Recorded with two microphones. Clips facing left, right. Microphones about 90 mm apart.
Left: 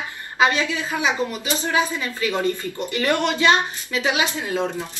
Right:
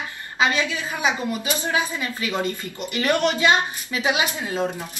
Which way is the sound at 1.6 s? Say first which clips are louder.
Left 4 dB; 20° right (ahead or behind).